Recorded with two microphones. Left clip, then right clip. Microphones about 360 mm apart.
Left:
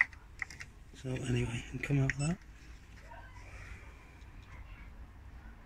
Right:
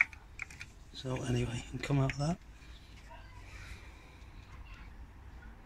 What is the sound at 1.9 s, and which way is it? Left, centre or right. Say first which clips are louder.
Speech: right 1 dB; right.